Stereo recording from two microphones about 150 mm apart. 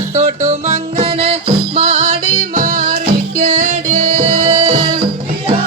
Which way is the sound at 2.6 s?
60° right (ahead or behind).